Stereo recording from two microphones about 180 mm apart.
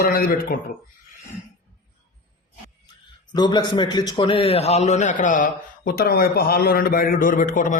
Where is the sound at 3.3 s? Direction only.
25° left (ahead or behind).